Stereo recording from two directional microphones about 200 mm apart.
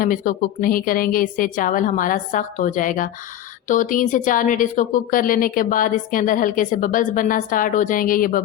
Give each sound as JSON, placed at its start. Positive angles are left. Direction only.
{"t": 0.0, "sound": "a woman's voice", "side_deg": 45}